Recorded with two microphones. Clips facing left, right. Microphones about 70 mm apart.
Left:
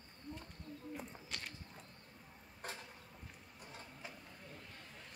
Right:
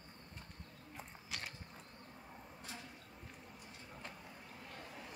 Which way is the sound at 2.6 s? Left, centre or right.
Left.